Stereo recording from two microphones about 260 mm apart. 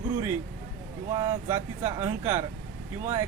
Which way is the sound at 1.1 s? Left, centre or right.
Centre.